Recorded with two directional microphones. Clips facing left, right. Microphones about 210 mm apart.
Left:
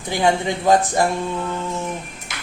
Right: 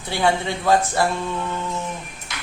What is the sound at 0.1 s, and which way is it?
Speech, 15° left (ahead or behind).